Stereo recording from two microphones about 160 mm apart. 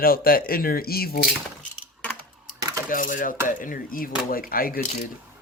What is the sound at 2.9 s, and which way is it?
Dishes, 55° left (ahead or behind).